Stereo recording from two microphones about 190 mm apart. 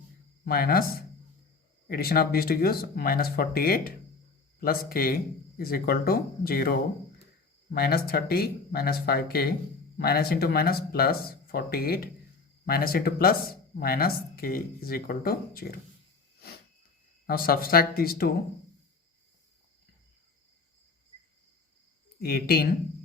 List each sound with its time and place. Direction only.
0.4 s speech: 50° left (ahead or behind)
17.2 s speech: 50° left (ahead or behind)
22.2 s speech: 55° left (ahead or behind)